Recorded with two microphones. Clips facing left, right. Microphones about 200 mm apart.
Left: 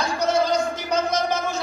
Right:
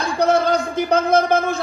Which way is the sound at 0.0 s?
55° right (ahead or behind).